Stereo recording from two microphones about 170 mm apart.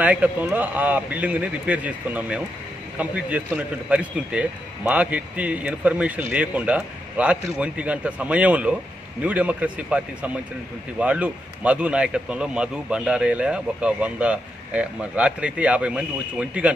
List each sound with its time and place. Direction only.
0.0 s a man's voice: 10° right (ahead or behind)